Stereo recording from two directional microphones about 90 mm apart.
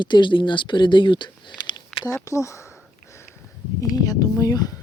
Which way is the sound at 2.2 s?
35° left (ahead or behind).